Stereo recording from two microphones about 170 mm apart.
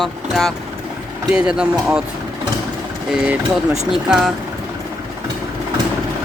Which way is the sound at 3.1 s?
5° right (ahead or behind).